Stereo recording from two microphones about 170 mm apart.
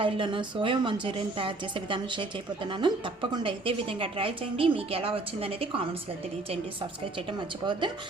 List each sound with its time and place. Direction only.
0.0 s a woman's voice: 30° right (ahead or behind)
7.3 s a woman's voice: 25° right (ahead or behind)